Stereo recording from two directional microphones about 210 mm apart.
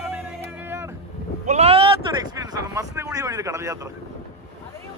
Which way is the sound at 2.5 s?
15° right (ahead or behind).